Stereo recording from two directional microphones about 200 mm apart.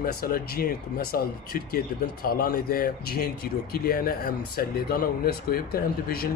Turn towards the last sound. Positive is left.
turn(degrees=50)  # may be behind; listen again after turning